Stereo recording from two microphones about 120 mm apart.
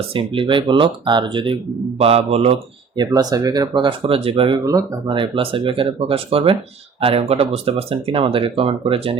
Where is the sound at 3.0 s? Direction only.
30° right (ahead or behind); by 4.6 s 50° right (ahead or behind).